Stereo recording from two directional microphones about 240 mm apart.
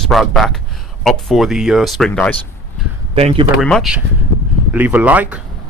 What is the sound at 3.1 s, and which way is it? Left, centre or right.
Speech, right.